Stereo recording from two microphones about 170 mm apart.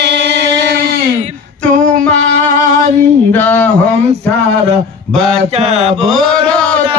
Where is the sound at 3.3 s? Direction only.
10° left (ahead or behind).